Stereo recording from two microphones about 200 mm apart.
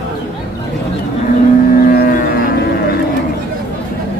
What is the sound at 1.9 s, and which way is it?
Music, 50° left (ahead or behind).